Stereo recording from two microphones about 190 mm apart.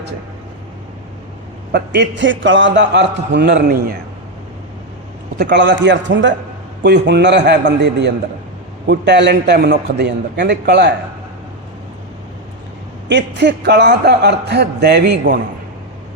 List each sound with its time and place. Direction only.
1.7 s speech: 65° right (ahead or behind)
5.4 s a man's voice: 65° right (ahead or behind)
6.8 s speech: 60° right (ahead or behind)
13.1 s speech: 65° right (ahead or behind)